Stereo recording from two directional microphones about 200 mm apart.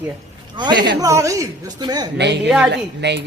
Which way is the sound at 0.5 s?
20° right (ahead or behind).